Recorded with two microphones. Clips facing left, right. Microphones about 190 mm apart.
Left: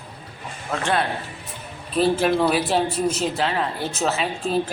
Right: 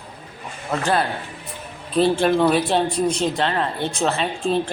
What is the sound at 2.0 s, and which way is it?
Speech, centre (ahead or behind).